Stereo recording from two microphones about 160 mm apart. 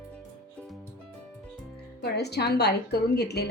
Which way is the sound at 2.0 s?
90° left.